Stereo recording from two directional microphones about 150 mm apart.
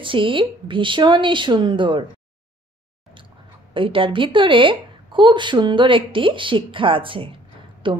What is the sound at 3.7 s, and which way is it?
A woman's voice, 35° right (ahead or behind).